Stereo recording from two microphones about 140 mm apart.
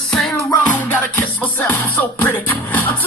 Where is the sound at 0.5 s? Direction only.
20° left (ahead or behind).